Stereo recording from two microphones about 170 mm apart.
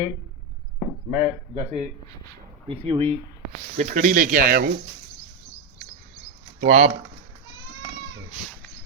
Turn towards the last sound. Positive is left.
turn(degrees=-50)  # may be behind; listen again after turning